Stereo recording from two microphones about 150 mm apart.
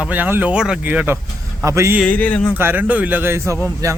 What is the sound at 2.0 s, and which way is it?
Speech, 10° left (ahead or behind).